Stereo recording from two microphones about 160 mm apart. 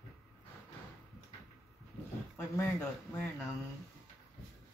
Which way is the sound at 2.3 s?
15° left (ahead or behind).